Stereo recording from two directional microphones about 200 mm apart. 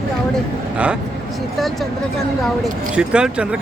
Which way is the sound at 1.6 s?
Centre (ahead or behind).